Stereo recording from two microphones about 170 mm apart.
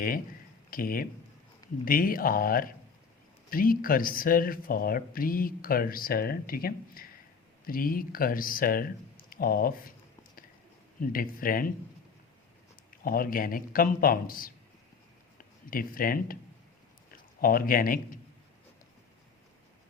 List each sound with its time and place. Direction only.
0.7 s speech: 60° left (ahead or behind)
11.0 s speech: 55° left (ahead or behind)
13.0 s speech: 55° left (ahead or behind)
17.4 s speech: 55° left (ahead or behind)